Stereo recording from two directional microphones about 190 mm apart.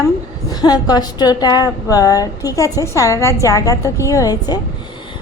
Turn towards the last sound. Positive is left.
turn(degrees=20)  # may be behind; listen again after turning